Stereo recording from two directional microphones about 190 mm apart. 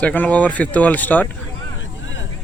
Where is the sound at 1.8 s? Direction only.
80° left.